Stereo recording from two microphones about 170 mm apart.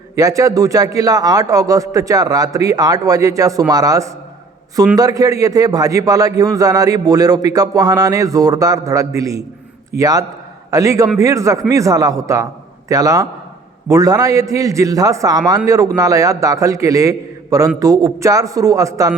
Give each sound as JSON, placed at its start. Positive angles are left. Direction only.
{"t": 0.2, "sound": "a man's voice", "side_deg": -20}